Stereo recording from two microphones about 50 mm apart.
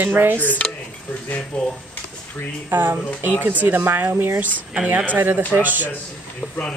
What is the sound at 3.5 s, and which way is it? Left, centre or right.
Speech, right.